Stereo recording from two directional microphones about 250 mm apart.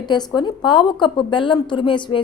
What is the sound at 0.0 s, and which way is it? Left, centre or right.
A woman's voice, centre.